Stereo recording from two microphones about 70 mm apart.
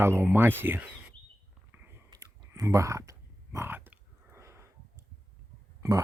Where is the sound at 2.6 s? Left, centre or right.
Right.